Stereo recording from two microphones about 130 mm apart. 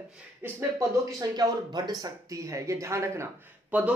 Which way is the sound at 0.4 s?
20° right (ahead or behind).